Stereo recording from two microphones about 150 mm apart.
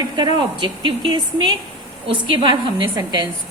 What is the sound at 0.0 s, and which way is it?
A woman's voice, 30° right (ahead or behind).